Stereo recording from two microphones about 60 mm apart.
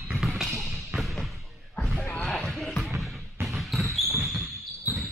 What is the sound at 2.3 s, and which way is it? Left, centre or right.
Music, centre.